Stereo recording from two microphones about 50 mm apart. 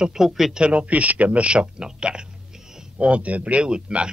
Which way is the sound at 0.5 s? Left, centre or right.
Right.